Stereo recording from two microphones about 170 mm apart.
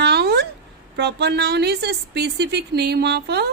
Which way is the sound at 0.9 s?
85° right.